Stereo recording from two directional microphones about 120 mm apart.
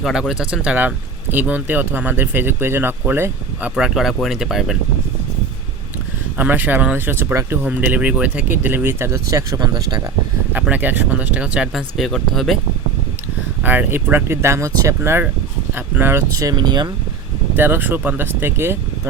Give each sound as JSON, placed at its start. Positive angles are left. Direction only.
{"t": 0.0, "sound": "speech", "side_deg": -5}
{"t": 3.8, "sound": "speech", "side_deg": -5}
{"t": 6.3, "sound": "speech", "side_deg": -15}
{"t": 10.5, "sound": "speech", "side_deg": -15}
{"t": 13.6, "sound": "speech", "side_deg": -15}
{"t": 16.3, "sound": "speech", "side_deg": -30}
{"t": 17.6, "sound": "speech", "side_deg": -15}